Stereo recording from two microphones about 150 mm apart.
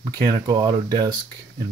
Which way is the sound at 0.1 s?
25° right (ahead or behind).